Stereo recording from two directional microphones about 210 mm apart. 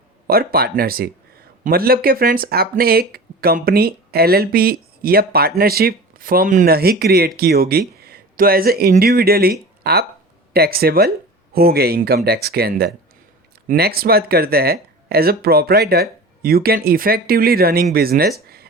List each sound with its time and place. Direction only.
0.3 s speech: 45° right (ahead or behind)